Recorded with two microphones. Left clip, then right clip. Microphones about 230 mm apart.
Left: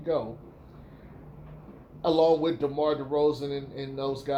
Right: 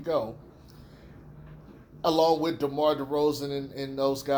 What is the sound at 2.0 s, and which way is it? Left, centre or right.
A man's voice, right.